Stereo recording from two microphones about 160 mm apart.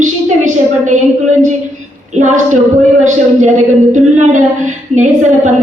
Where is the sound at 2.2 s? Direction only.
50° right (ahead or behind).